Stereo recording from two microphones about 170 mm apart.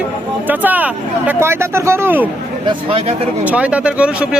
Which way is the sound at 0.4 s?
10° right (ahead or behind).